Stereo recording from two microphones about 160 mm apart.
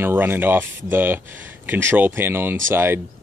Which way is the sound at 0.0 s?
10° right (ahead or behind).